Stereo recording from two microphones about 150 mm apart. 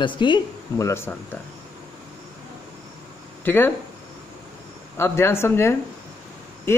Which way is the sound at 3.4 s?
15° left (ahead or behind).